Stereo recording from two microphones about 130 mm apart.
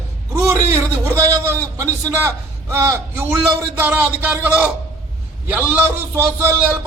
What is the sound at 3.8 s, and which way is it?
A man's voice, 15° right (ahead or behind).